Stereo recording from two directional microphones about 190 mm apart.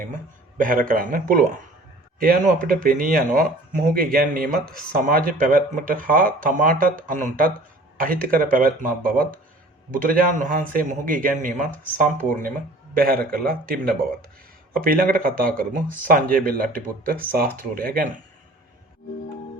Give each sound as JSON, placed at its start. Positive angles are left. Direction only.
{"t": 0.5, "sound": "speech", "side_deg": -45}
{"t": 13.0, "sound": "speech", "side_deg": -50}